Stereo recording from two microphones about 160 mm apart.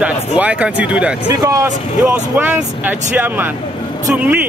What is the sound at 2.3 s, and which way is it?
Speech, 10° right (ahead or behind).